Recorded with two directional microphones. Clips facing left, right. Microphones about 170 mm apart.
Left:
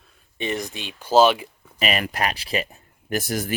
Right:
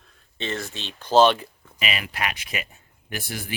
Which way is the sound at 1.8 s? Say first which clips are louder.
Left 5 dB; 45° left (ahead or behind).